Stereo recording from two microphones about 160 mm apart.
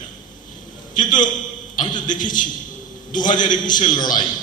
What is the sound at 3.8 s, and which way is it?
Speech, 25° left (ahead or behind).